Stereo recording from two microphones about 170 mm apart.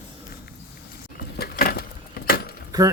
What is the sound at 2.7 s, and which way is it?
Speech, 20° right (ahead or behind).